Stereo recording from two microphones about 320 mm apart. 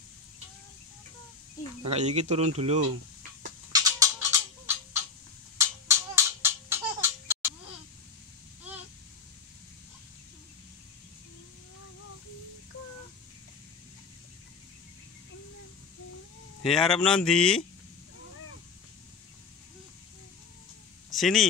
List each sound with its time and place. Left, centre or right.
1.9 s speech: right
3.7 s music: centre
5.6 s a sound: centre
16.6 s speech: centre
21.1 s speech: centre